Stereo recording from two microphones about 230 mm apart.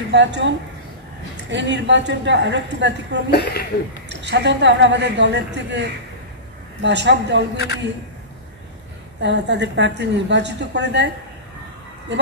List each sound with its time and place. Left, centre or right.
0.1 s a woman's voice: right
3.3 s speech: left
4.2 s a woman's voice: right
9.2 s a woman's voice: right
12.1 s speech: right